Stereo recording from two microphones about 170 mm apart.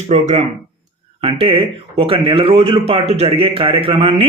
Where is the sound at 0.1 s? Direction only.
40° right (ahead or behind).